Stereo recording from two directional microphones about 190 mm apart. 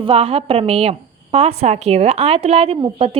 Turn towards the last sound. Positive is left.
turn(degrees=-30)  # may be behind; listen again after turning